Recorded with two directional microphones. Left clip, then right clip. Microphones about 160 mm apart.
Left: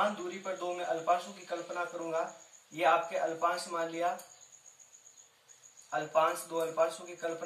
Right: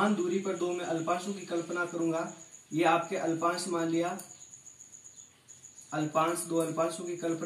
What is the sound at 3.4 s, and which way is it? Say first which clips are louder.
Speech: right 2 dB; 15° left (ahead or behind).